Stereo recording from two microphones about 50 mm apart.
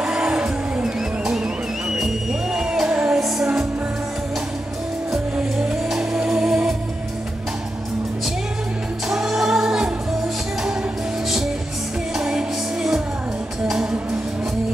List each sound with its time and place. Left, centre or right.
0.0 s music: right
2.5 s music: centre
3.2 s music: centre
5.9 s music: centre
9.1 s music: centre
12.2 s music: centre